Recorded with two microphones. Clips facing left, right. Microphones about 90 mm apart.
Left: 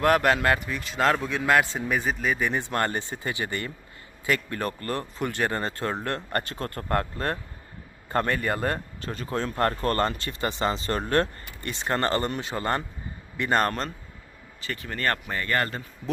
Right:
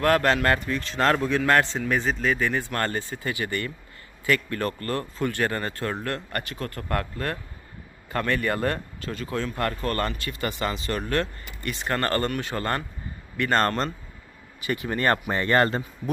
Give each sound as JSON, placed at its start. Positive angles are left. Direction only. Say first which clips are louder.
{"t": 0.0, "sound": "a man's voice", "louder": "even", "side_deg": 15}
{"t": 13.6, "sound": "a man's voice", "louder": "right 3 dB", "side_deg": 5}
{"t": 14.6, "sound": "speech", "louder": "right 4 dB", "side_deg": -15}